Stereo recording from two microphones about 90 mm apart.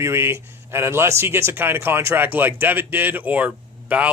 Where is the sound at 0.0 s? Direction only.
30° right (ahead or behind).